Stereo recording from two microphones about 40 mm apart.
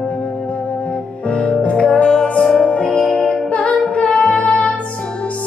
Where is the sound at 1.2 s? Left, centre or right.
Left.